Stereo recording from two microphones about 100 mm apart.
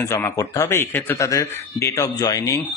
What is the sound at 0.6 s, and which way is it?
Speech, 25° left (ahead or behind).